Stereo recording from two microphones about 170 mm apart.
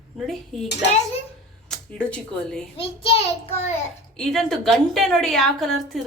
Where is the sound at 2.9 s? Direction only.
35° left (ahead or behind).